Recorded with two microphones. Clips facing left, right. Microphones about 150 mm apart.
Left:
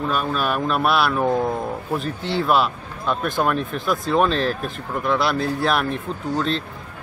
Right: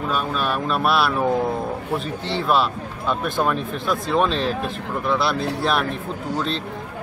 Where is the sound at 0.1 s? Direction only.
Centre (ahead or behind).